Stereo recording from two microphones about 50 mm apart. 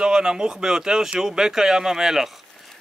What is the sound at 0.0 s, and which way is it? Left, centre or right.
Speech, centre.